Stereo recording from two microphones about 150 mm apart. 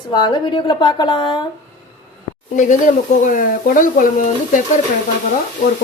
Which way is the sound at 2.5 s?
55° left (ahead or behind).